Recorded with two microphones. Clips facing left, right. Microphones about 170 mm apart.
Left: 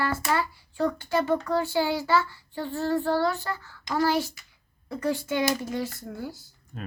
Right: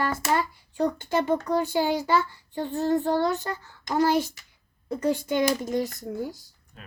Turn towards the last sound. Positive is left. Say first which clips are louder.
# left 10 dB
turn(degrees=45)  # may be behind; listen again after turning